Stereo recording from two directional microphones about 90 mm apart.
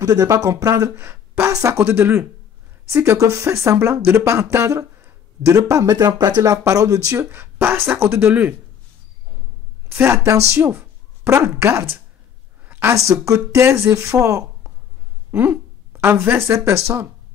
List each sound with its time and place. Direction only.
0.0 s speech: 45° right (ahead or behind)
0.9 s speech: 25° right (ahead or behind)
1.5 s speech: 35° right (ahead or behind)
1.9 s speech: 25° right (ahead or behind)
7.5 s speech: 25° right (ahead or behind)
9.9 s speech: 30° right (ahead or behind)
12.6 s a sound: 25° right (ahead or behind)
12.9 s a woman's voice: 35° right (ahead or behind)